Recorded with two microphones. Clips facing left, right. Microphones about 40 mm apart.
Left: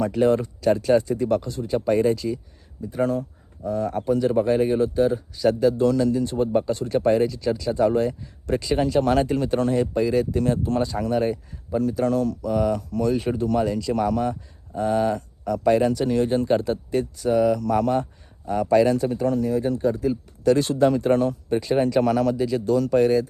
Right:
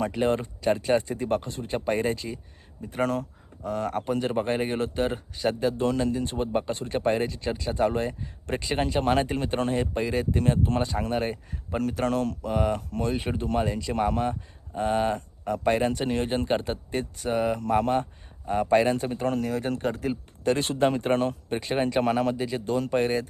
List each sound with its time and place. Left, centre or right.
0.1 s speech: right
2.8 s speech: right
11.7 s speech: right
20.4 s speech: right